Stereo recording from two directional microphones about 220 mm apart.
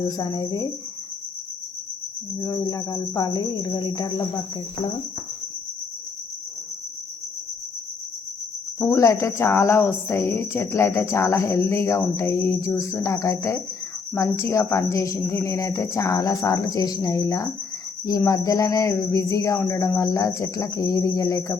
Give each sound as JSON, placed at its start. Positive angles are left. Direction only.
{"t": 0.2, "sound": "a woman's voice", "side_deg": 15}
{"t": 2.4, "sound": "a woman's voice", "side_deg": 15}
{"t": 8.8, "sound": "a woman's voice", "side_deg": 15}